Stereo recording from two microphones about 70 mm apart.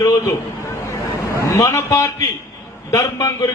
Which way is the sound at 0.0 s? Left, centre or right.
Left.